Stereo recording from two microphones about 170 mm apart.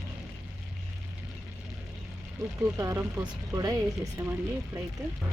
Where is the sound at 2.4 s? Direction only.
20° right (ahead or behind).